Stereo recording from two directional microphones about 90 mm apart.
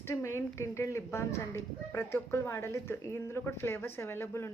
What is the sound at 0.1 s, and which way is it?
Speech, 30° left (ahead or behind).